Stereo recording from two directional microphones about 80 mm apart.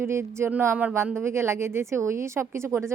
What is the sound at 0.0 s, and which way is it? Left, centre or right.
A woman's voice, right.